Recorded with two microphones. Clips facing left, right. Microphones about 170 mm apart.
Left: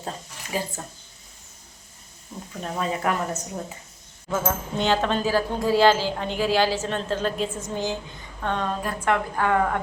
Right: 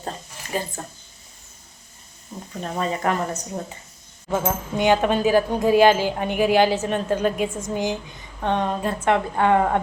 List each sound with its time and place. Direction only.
0.8 s speech: centre (ahead or behind)
2.6 s speech: centre (ahead or behind)
4.3 s a woman's voice: 15° right (ahead or behind)